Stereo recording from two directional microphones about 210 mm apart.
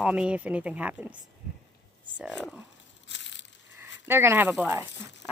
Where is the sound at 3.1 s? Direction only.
60° left (ahead or behind).